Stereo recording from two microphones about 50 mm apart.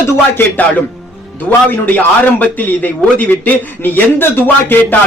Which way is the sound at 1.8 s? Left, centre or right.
Left.